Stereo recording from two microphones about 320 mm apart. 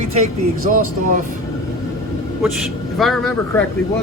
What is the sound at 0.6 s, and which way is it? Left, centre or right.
Speech, right.